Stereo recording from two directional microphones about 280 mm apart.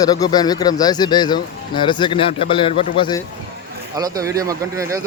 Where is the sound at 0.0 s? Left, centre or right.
Centre.